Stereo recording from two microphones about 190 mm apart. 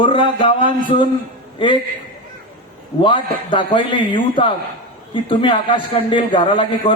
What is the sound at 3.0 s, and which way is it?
Speech, 25° left (ahead or behind).